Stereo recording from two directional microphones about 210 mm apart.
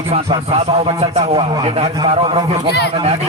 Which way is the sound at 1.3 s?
20° right (ahead or behind).